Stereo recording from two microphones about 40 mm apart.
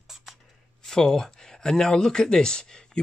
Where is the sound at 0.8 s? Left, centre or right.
Centre.